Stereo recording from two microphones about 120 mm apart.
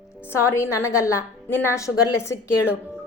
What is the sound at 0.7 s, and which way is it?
A woman's voice, 25° left (ahead or behind).